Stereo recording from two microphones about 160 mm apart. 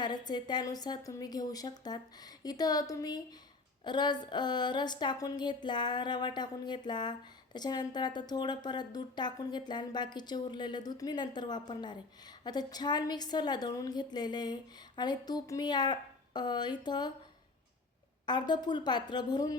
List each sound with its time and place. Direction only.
0.0 s a woman's voice: 25° left (ahead or behind)
18.3 s a woman's voice: 25° left (ahead or behind)